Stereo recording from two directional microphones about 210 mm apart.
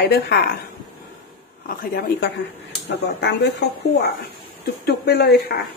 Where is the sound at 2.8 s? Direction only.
55° left (ahead or behind).